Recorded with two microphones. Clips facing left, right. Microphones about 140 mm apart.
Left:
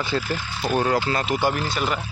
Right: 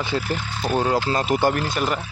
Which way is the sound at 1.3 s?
25° right (ahead or behind).